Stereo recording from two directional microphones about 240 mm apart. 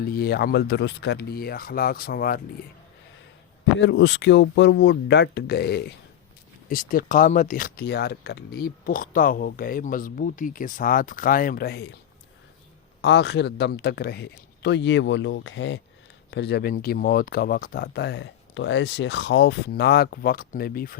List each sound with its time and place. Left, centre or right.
0.1 s speech: left
3.8 s a man's voice: left
13.0 s a man's voice: left